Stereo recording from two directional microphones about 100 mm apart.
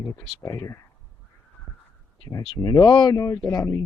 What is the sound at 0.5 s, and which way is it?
Speech, 35° left (ahead or behind).